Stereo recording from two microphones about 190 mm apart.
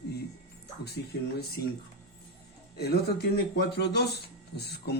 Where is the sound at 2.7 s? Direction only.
55° left (ahead or behind).